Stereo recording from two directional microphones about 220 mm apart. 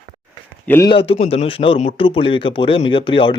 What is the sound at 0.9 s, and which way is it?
Speech, 25° left (ahead or behind).